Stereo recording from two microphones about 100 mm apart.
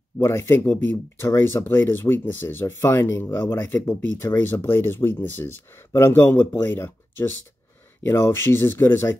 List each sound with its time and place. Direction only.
0.2 s speech: 25° left (ahead or behind)